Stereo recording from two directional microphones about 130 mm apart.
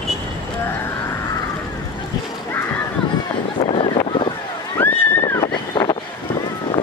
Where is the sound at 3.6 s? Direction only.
45° left (ahead or behind).